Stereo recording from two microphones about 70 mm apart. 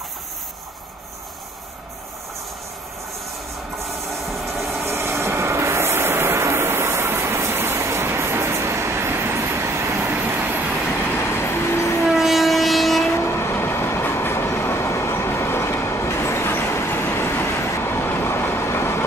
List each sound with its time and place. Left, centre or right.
3.7 s train: centre
4.8 s vehicle: right
11.1 s train: left
12.1 s train: centre
13.1 s train: left